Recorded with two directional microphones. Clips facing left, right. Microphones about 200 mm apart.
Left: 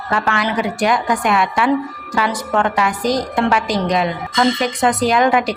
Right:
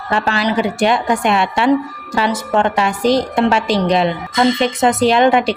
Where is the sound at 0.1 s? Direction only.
25° right (ahead or behind).